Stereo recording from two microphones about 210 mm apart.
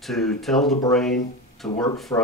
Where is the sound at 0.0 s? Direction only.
Centre (ahead or behind).